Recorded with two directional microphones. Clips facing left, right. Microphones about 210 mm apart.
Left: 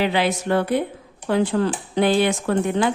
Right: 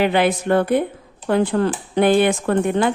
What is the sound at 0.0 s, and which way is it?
Speech, 55° right (ahead or behind).